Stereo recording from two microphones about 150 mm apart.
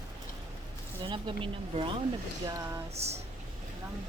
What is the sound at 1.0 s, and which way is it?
Speech, 35° right (ahead or behind).